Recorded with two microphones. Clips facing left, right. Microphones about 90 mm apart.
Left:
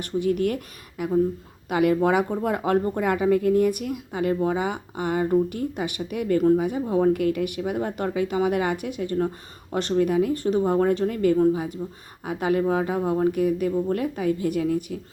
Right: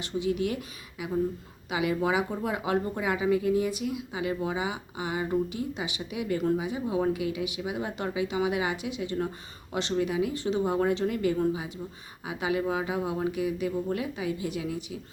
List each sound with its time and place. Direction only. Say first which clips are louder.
0.0 s speech: left 5 dB; 50° left (ahead or behind)
7.1 s speech: left 7 dB; 55° left (ahead or behind)
11.8 s speech: left 6 dB; 15° left (ahead or behind)
12.2 s speech: left 6 dB; 50° left (ahead or behind)